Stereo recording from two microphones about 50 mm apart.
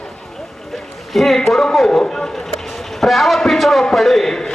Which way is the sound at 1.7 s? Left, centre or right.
Centre.